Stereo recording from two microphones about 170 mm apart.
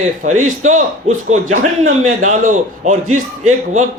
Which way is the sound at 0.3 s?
45° right (ahead or behind).